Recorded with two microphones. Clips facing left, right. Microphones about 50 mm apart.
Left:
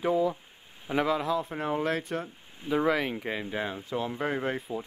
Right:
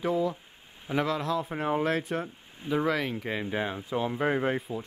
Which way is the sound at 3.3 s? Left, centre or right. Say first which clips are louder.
Right 2 dB; centre.